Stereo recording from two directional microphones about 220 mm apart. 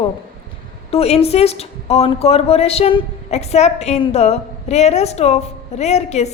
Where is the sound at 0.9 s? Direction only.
25° left (ahead or behind).